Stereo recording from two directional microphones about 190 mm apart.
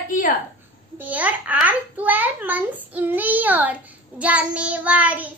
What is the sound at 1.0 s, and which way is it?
Child singing, 10° right (ahead or behind).